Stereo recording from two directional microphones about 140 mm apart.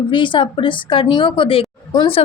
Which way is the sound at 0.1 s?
35° left (ahead or behind).